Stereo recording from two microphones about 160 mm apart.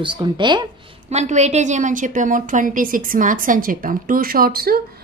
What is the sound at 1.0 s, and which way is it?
A woman's voice, 45° right (ahead or behind).